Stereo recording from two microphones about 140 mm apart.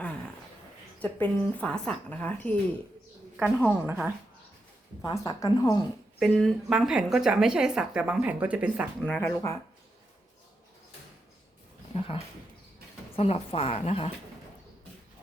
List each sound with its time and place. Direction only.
1.5 s a woman's voice: 5° left (ahead or behind)
3.3 s a woman's voice: 10° right (ahead or behind)
5.0 s a woman's voice: 30° left (ahead or behind)
6.1 s speech: centre (ahead or behind)
9.0 s a woman's voice: 15° left (ahead or behind)
11.9 s a woman's voice: 40° left (ahead or behind)